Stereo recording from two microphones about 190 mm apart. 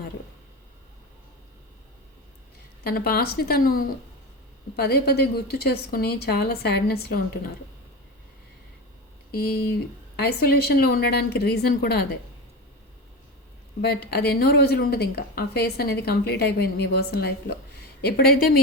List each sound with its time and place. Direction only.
2.8 s a woman's voice: 55° left (ahead or behind)
9.3 s a woman's voice: 55° left (ahead or behind)
13.8 s a woman's voice: 55° left (ahead or behind)